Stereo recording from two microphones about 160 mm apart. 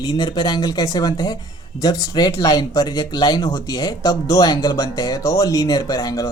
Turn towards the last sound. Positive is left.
turn(degrees=20)  # may be behind; listen again after turning